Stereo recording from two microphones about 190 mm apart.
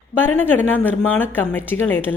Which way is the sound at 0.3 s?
10° left (ahead or behind).